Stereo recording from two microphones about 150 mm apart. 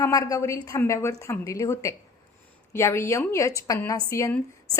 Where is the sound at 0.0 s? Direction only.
20° left (ahead or behind).